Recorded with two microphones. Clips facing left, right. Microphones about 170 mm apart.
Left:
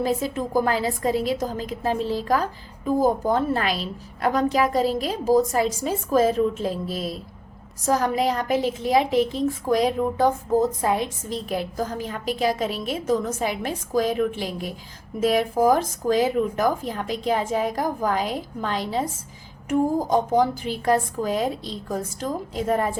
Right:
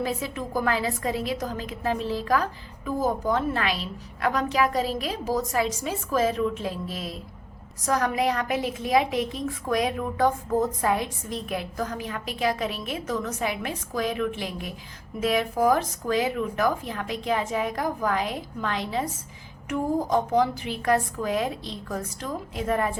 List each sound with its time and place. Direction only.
0.0 s a woman's voice: 35° left (ahead or behind)
20.1 s speech: 30° left (ahead or behind)